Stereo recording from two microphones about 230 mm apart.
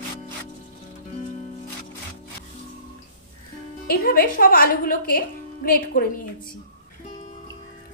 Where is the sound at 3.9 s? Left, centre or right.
Left.